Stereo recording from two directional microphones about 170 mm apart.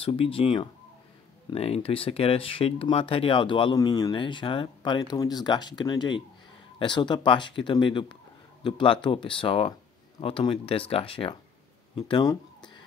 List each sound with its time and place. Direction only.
0.0 s speech: 30° left (ahead or behind)